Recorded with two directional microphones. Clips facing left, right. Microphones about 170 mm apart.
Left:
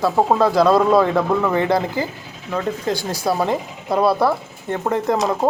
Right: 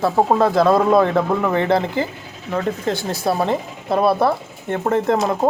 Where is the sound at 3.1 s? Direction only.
25° right (ahead or behind).